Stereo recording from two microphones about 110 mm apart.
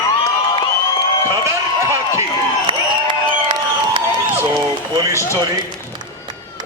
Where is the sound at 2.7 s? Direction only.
55° right (ahead or behind).